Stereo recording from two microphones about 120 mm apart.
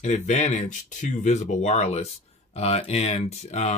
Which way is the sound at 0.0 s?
80° left.